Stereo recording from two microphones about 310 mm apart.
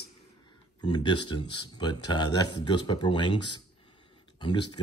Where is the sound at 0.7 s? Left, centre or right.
Centre.